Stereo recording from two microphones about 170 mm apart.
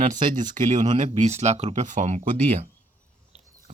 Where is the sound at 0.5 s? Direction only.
45° right (ahead or behind).